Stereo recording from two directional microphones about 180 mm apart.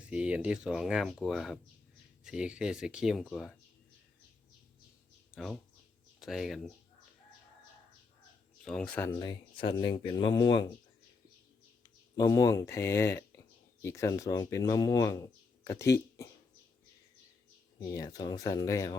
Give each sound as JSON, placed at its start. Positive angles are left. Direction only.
{"t": 0.0, "sound": "speech", "side_deg": -5}
{"t": 5.3, "sound": "speech", "side_deg": 0}
{"t": 8.6, "sound": "speech", "side_deg": 5}
{"t": 9.1, "sound": "speech", "side_deg": 25}
{"t": 12.1, "sound": "speech", "side_deg": 20}
{"t": 17.7, "sound": "speech", "side_deg": 20}